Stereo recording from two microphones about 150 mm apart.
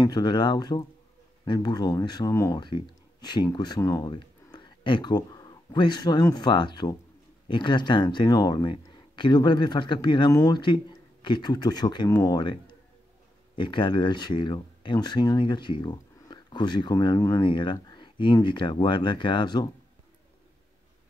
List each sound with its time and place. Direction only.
0.0 s speech: 30° left (ahead or behind)
13.6 s speech: 30° left (ahead or behind)